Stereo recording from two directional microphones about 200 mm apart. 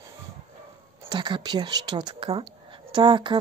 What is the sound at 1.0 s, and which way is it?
Speech, 25° right (ahead or behind).